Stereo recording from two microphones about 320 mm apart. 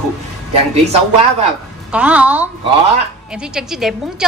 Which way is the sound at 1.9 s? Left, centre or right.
Centre.